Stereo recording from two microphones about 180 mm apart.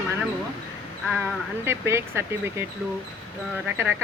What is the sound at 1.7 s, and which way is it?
Speech, 15° right (ahead or behind).